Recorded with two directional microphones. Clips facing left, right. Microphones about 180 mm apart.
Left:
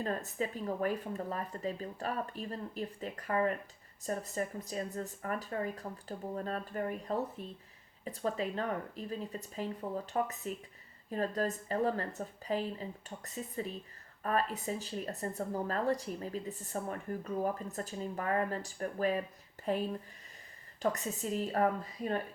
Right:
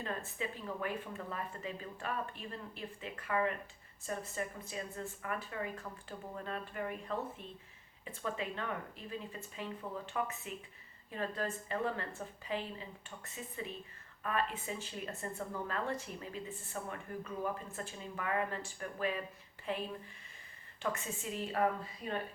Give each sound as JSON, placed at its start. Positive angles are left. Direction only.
{"t": 0.0, "sound": "speech", "side_deg": 40}
{"t": 20.8, "sound": "speech", "side_deg": 40}